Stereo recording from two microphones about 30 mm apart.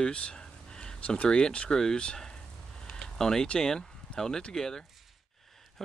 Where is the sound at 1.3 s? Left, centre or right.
Left.